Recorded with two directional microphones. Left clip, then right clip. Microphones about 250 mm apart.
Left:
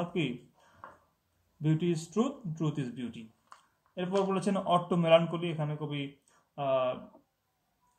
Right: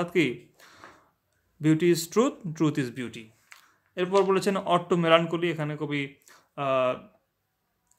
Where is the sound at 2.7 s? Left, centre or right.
Right.